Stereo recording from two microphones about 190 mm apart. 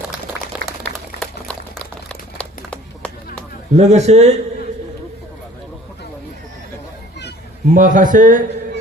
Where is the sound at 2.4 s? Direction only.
5° left (ahead or behind).